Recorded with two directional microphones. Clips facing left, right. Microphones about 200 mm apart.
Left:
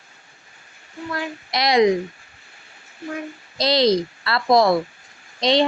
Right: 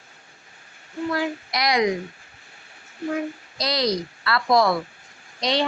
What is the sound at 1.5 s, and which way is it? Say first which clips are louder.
Speech: left 7 dB; 25° left (ahead or behind).